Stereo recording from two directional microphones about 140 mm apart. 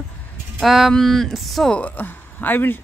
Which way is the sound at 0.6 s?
Centre (ahead or behind).